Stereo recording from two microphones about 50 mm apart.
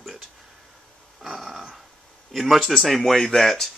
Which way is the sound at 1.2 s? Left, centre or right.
Centre.